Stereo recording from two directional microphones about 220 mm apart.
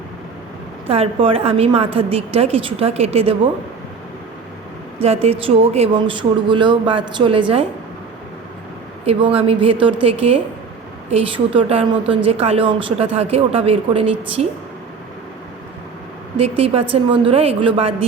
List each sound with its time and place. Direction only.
0.9 s a woman's voice: 25° right (ahead or behind)
4.9 s a woman's voice: 25° right (ahead or behind)
9.0 s a woman's voice: 25° right (ahead or behind)
16.4 s a woman's voice: 25° right (ahead or behind)